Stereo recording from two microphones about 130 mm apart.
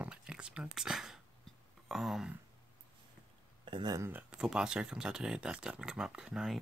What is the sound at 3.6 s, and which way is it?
Speech, 35° right (ahead or behind).